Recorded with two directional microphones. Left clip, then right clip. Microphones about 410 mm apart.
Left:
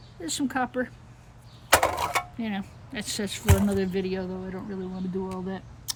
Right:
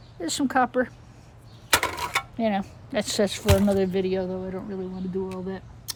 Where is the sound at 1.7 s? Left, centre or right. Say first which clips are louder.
Left 2 dB; centre.